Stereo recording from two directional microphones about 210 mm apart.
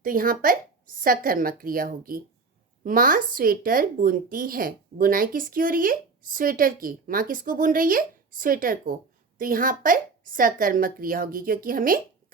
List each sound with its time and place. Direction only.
0.0 s speech: 40° right (ahead or behind)